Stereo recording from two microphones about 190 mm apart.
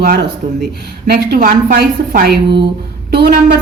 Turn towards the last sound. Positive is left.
turn(degrees=-55)  # may be behind; listen again after turning